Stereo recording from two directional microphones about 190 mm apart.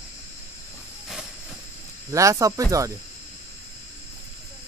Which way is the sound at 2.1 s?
15° right (ahead or behind).